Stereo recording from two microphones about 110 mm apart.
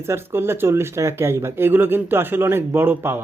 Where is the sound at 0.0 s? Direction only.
20° right (ahead or behind).